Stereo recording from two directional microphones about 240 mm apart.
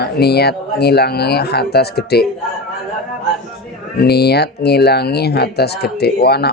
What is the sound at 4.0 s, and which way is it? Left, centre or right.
Speech, left.